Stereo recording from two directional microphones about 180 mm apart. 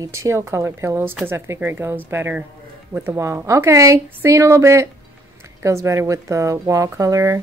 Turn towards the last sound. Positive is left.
turn(degrees=-15)  # may be behind; listen again after turning